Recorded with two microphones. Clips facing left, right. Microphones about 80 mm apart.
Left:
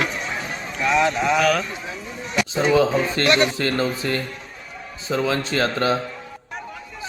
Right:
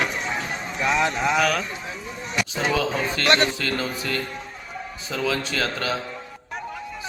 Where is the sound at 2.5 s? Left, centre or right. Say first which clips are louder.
Left 7 dB; left.